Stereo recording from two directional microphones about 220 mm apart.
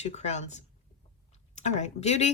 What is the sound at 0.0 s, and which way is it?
A woman's voice, 30° left (ahead or behind).